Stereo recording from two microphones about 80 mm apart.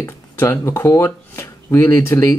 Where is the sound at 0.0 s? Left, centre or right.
Left.